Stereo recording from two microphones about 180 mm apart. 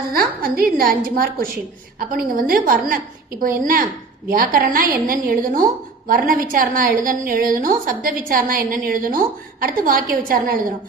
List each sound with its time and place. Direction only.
0.1 s a woman's voice: 55° right (ahead or behind)